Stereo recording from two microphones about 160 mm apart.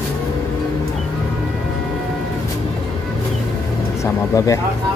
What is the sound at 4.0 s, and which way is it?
Speech, 20° left (ahead or behind).